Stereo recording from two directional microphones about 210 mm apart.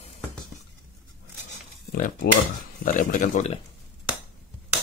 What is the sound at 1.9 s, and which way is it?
Speech, 40° left (ahead or behind).